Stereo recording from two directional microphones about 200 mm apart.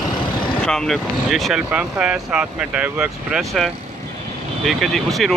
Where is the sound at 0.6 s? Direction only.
5° left (ahead or behind).